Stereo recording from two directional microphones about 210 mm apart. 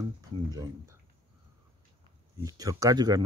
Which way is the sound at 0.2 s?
15° right (ahead or behind).